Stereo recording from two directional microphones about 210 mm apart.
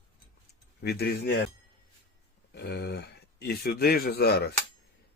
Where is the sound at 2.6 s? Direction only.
55° left (ahead or behind).